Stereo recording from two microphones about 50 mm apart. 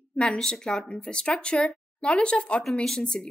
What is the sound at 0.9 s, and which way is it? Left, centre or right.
Speech, left.